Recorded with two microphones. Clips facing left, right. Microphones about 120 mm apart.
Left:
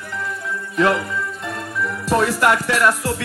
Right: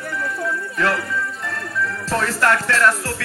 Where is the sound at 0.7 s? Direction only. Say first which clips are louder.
Left 5 dB; 20° left (ahead or behind).